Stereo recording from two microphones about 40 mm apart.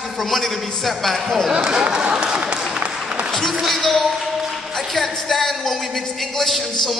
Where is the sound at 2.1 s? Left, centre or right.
Right.